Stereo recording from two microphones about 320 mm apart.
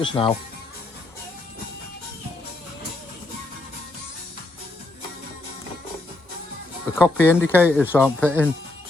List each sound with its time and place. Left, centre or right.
0.0 s speech: centre
7.0 s speech: centre